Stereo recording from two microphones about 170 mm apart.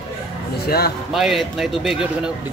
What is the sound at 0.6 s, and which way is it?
Speech, 65° left (ahead or behind).